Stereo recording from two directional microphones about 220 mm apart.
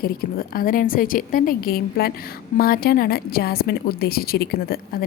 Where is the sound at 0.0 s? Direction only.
40° left (ahead or behind).